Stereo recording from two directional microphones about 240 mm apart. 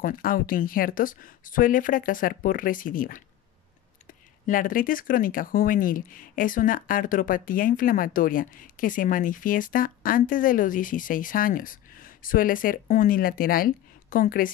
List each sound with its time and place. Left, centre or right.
0.0 s speech: left
4.5 s speech: left